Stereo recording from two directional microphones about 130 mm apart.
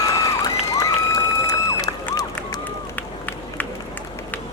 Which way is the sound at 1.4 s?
30° left (ahead or behind).